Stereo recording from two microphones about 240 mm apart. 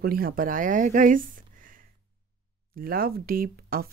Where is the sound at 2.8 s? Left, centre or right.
Right.